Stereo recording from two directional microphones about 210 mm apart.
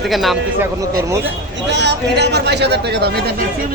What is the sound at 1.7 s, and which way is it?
Speech, 55° right (ahead or behind).